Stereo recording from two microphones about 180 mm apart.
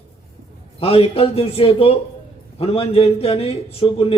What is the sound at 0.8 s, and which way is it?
A man's voice, 35° left (ahead or behind).